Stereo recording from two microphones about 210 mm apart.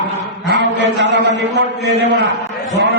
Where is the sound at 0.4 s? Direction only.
55° right (ahead or behind).